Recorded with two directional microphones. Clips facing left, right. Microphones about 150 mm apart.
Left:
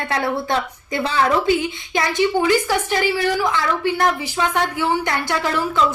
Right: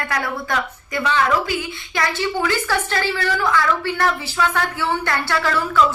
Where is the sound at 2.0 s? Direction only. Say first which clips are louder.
Left 4 dB; 20° left (ahead or behind).